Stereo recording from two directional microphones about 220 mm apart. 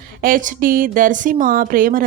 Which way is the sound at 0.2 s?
40° right (ahead or behind).